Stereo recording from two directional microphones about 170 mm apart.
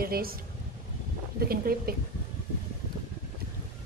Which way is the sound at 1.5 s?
60° right (ahead or behind).